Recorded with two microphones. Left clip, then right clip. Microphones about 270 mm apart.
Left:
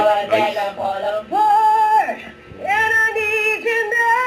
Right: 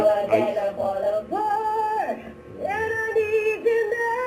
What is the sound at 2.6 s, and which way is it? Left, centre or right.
Female singing, centre.